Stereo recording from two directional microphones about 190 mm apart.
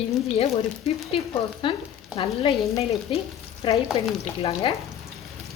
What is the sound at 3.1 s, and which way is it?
Speech, 25° left (ahead or behind).